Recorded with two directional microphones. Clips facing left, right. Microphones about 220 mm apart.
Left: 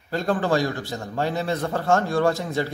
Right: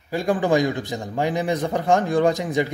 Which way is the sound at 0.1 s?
15° right (ahead or behind).